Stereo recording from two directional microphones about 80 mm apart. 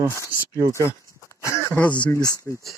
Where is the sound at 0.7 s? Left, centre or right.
Left.